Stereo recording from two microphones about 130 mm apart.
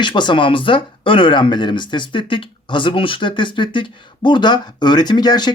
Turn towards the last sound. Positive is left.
turn(degrees=30)  # may be behind; listen again after turning